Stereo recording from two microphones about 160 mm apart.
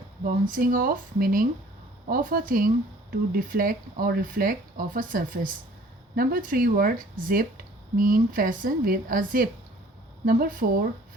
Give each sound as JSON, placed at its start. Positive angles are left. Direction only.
{"t": 0.3, "sound": "speech", "side_deg": -60}